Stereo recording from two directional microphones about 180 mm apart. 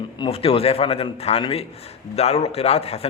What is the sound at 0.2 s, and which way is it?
A man's voice, 30° left (ahead or behind).